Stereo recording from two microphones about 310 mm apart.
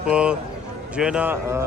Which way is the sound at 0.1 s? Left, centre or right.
Centre.